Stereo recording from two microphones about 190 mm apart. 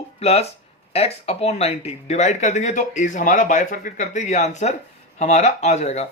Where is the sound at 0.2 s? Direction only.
35° left (ahead or behind).